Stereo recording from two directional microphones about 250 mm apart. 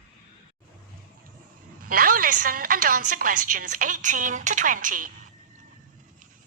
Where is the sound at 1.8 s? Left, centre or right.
Right.